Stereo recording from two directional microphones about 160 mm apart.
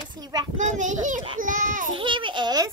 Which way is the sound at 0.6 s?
50° right (ahead or behind).